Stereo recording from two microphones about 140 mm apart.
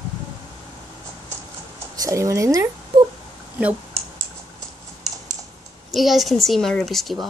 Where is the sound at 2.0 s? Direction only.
20° right (ahead or behind).